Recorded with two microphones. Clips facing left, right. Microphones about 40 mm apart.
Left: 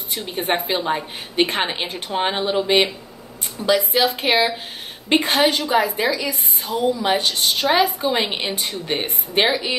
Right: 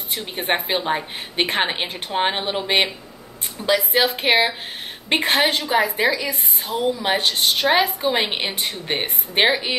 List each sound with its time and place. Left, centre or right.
0.3 s a woman's voice: right
3.6 s a woman's voice: centre
4.0 s a woman's voice: right
6.6 s a woman's voice: right
8.5 s speech: right
9.3 s a woman's voice: right